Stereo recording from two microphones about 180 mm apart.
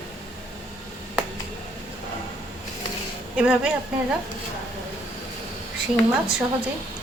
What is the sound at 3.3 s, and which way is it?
Speech, 5° right (ahead or behind).